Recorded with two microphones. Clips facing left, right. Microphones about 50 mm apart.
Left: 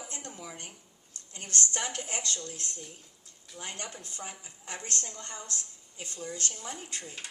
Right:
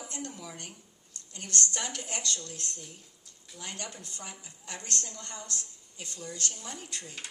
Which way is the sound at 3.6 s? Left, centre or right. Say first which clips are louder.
Left 1 dB; left.